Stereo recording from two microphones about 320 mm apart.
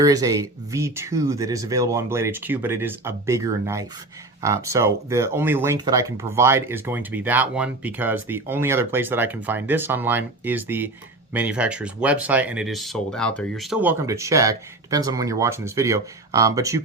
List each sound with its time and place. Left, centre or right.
0.0 s speech: centre